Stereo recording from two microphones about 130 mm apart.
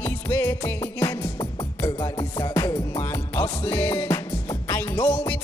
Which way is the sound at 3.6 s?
10° left (ahead or behind).